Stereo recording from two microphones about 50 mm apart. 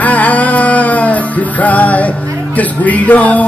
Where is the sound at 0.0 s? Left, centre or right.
Left.